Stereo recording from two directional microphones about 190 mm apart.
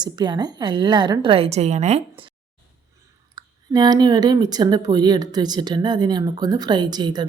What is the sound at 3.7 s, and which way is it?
A woman's voice, 20° right (ahead or behind).